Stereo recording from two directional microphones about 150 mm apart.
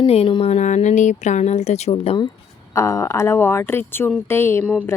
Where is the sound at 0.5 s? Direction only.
50° left (ahead or behind).